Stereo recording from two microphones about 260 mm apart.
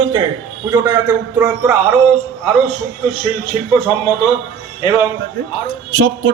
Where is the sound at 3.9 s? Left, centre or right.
Centre.